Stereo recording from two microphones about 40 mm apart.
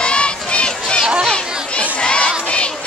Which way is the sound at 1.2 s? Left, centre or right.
Left.